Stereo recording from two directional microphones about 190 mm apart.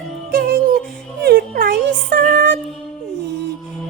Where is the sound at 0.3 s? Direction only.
50° right (ahead or behind).